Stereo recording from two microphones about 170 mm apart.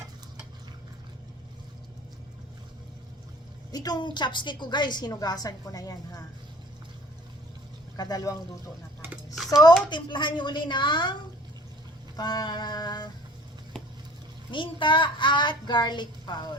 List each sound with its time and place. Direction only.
3.7 s a woman's voice: 25° left (ahead or behind)
7.9 s a woman's voice: 20° left (ahead or behind)
9.9 s a woman's voice: 25° left (ahead or behind)
12.1 s a woman's voice: 25° left (ahead or behind)
14.5 s a woman's voice: 30° left (ahead or behind)